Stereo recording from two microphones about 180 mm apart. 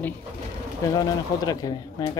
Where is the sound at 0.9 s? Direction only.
20° left (ahead or behind).